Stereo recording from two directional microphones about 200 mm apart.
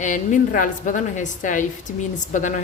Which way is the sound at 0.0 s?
40° left (ahead or behind).